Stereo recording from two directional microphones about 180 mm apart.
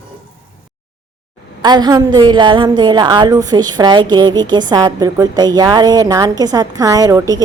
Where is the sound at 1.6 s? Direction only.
25° right (ahead or behind).